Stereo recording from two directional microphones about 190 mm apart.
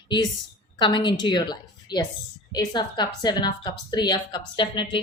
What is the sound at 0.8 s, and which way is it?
Speech, 25° left (ahead or behind).